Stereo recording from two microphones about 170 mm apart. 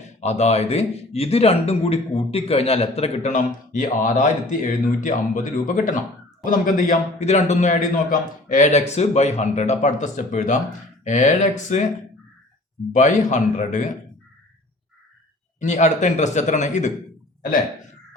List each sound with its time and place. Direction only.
0.0 s a man's voice: 40° left (ahead or behind)
12.9 s a man's voice: 45° left (ahead or behind)
15.6 s a man's voice: 45° left (ahead or behind)